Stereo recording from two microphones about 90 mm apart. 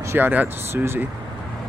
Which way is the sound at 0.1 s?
20° right (ahead or behind).